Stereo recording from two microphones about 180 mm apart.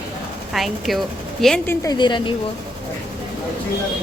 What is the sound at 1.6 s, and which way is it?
Speech, 20° left (ahead or behind).